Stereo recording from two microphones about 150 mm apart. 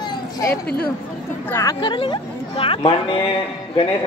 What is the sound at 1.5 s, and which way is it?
Speech, 20° left (ahead or behind).